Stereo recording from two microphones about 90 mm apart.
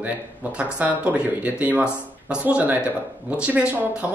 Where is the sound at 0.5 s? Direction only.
15° right (ahead or behind).